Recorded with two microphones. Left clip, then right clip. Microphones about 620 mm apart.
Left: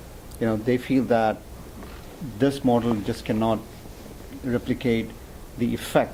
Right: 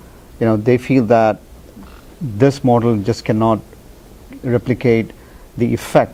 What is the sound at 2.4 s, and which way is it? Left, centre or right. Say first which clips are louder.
Speech: right 8 dB; right.